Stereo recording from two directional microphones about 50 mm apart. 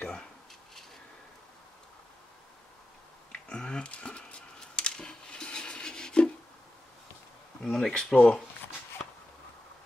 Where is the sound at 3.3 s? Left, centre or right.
Centre.